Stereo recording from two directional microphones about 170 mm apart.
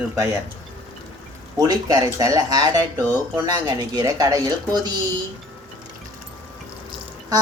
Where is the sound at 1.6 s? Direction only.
20° right (ahead or behind).